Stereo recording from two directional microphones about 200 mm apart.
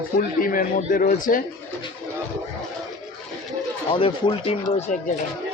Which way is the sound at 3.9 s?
25° left (ahead or behind).